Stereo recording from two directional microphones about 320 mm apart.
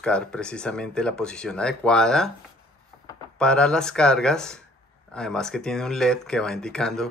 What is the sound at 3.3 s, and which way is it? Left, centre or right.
Speech, centre.